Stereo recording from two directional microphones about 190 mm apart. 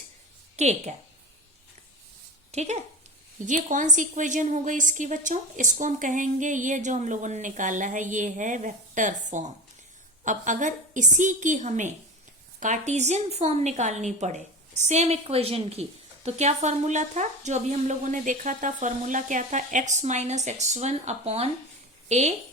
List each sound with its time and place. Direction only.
0.5 s a woman's voice: 35° right (ahead or behind)
2.5 s a woman's voice: 35° right (ahead or behind)
10.2 s a woman's voice: 40° right (ahead or behind)